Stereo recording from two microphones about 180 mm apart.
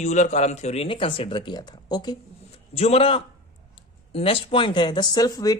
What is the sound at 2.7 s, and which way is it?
Speech, 35° left (ahead or behind).